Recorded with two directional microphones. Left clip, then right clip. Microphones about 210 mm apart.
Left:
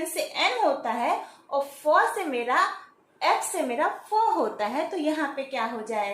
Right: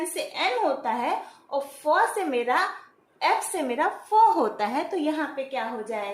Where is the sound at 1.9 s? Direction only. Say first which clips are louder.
Even; 20° right (ahead or behind).